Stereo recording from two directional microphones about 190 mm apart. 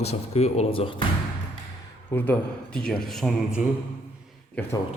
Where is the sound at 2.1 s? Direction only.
10° left (ahead or behind).